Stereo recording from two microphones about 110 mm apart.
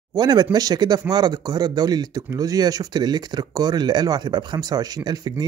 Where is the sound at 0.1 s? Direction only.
40° right (ahead or behind).